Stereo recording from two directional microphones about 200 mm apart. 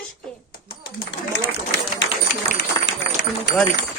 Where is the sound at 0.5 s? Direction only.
50° left (ahead or behind).